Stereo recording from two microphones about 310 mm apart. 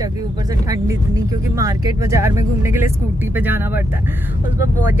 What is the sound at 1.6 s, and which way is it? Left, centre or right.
Speech, centre.